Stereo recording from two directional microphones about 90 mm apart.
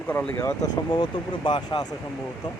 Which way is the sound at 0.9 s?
60° left (ahead or behind).